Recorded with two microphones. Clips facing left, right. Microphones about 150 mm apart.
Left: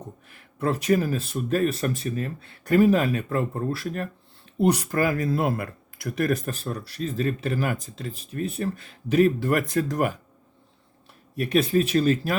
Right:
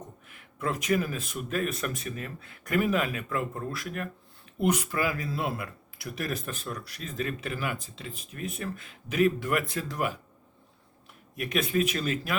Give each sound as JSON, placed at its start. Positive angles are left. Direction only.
{"t": 0.3, "sound": "speech", "side_deg": 35}
{"t": 6.5, "sound": "speech", "side_deg": 35}
{"t": 11.3, "sound": "speech", "side_deg": 35}